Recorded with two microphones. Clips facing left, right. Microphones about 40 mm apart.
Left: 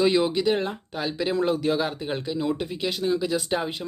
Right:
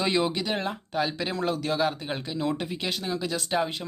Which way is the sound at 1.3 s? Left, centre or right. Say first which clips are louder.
Left 3 dB; centre.